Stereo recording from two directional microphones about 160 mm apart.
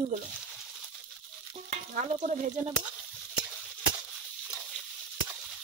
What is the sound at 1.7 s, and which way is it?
Stir, 50° right (ahead or behind).